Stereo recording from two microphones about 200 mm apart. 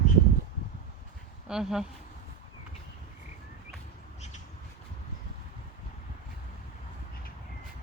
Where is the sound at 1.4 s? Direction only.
5° right (ahead or behind).